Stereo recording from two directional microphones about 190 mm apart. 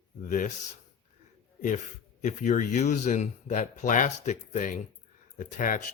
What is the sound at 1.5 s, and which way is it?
Speech, 40° left (ahead or behind).